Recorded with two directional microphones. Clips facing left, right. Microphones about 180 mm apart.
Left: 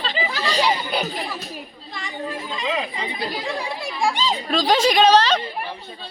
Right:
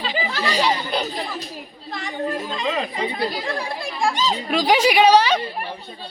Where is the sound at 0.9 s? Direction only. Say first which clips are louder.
Even; 10° left (ahead or behind).